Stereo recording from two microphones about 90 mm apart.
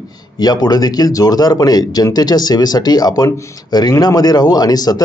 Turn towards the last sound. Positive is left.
turn(degrees=45)  # may be behind; listen again after turning